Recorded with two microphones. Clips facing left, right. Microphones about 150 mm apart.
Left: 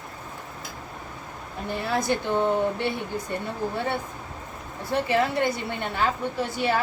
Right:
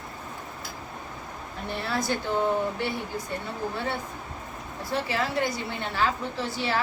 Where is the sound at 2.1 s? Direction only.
20° left (ahead or behind).